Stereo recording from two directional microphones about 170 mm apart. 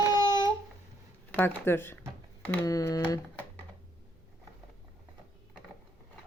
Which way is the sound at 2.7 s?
20° left (ahead or behind).